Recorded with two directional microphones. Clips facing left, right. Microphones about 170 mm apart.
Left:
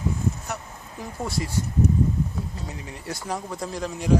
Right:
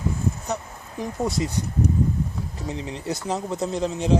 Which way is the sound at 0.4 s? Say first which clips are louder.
Right 5 dB; 20° right (ahead or behind).